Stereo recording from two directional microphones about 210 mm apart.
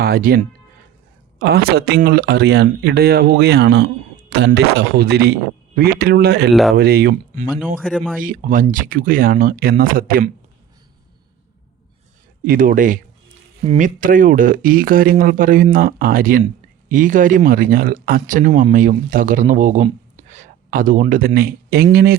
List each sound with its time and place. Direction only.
0.0 s a man's voice: 45° right (ahead or behind)
6.5 s speech: centre (ahead or behind)
6.7 s a man's voice: 50° right (ahead or behind)
7.8 s speech: centre (ahead or behind)
8.2 s a man's voice: 40° right (ahead or behind)
12.5 s a man's voice: 40° right (ahead or behind)